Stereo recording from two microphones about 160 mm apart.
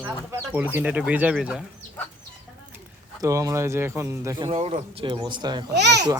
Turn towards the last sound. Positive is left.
turn(degrees=-90)